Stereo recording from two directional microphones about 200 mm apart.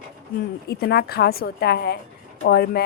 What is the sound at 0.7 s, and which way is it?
Speech, 55° left (ahead or behind).